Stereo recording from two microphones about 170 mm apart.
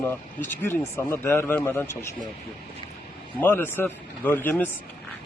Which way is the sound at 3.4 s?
10° left (ahead or behind).